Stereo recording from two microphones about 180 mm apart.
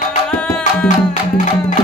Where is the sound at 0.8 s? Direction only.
45° left (ahead or behind).